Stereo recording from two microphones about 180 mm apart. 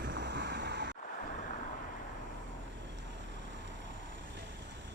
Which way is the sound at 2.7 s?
90° right.